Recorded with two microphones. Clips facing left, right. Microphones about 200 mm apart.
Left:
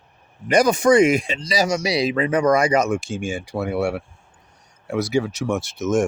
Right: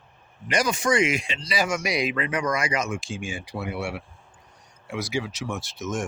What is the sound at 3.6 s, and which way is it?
Speech, 45° left (ahead or behind).